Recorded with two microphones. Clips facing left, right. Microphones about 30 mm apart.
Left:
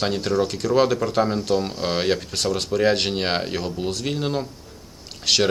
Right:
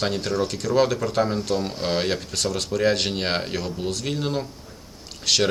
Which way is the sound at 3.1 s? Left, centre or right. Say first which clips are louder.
Left 2 dB; centre.